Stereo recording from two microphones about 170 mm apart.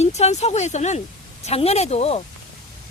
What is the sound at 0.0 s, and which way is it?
Speech, 40° left (ahead or behind).